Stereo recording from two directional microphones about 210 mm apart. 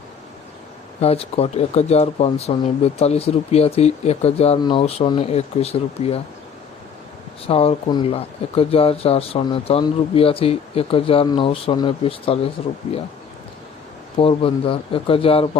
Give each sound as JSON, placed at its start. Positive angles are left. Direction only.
{"t": 1.0, "sound": "speech", "side_deg": 30}
{"t": 7.4, "sound": "speech", "side_deg": 30}
{"t": 14.2, "sound": "speech", "side_deg": 25}